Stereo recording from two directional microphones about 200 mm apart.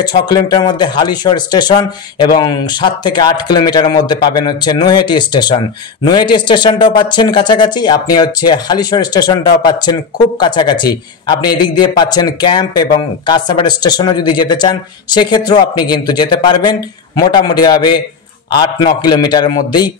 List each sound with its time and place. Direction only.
0.0 s speech: 20° left (ahead or behind)